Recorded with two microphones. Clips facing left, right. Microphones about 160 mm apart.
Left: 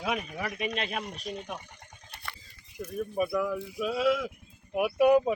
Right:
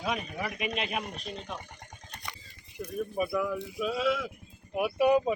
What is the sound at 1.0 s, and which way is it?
Speech, 40° right (ahead or behind).